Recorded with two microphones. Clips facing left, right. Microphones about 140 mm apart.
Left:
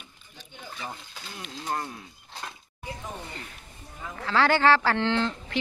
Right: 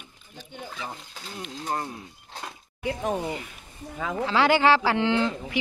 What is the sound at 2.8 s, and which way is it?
Speech, 75° right (ahead or behind).